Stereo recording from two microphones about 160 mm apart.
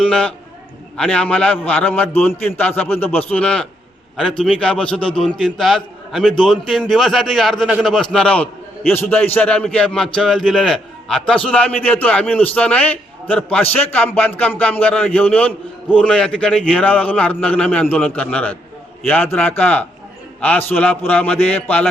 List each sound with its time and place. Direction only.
0.0 s a man's voice: 5° left (ahead or behind)